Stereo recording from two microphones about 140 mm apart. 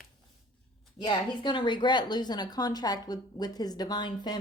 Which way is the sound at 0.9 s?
35° left (ahead or behind).